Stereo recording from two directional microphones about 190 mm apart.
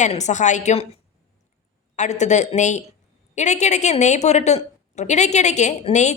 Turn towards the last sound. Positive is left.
turn(degrees=35)  # may be behind; listen again after turning